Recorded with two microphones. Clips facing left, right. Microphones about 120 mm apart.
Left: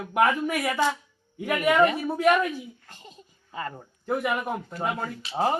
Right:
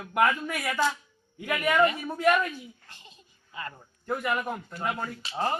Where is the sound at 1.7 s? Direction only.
15° left (ahead or behind).